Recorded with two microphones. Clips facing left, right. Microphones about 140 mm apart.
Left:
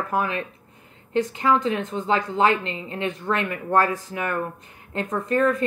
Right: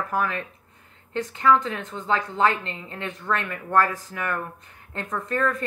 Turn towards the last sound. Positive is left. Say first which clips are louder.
# left 5 dB
turn(degrees=15)  # may be behind; listen again after turning